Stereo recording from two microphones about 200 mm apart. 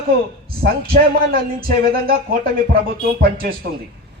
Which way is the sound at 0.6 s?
50° right (ahead or behind).